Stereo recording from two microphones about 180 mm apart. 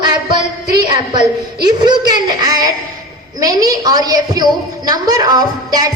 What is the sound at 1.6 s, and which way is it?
Speech, 25° right (ahead or behind).